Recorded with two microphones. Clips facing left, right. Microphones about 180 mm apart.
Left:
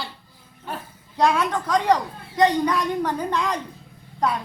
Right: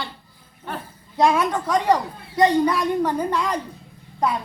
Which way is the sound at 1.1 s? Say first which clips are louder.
Right 2 dB; 10° right (ahead or behind).